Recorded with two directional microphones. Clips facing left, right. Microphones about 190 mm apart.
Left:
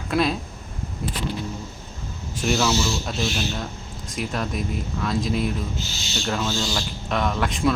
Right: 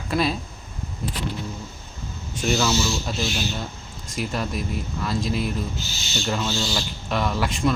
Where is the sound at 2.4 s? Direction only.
Centre (ahead or behind).